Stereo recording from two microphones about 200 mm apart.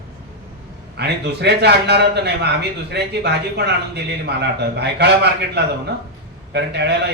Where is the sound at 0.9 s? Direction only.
55° right (ahead or behind).